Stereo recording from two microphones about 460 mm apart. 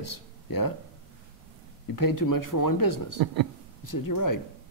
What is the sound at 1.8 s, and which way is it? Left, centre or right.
Speech, left.